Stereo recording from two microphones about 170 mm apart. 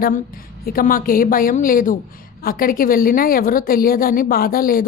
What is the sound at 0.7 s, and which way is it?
A woman's voice, 55° left (ahead or behind).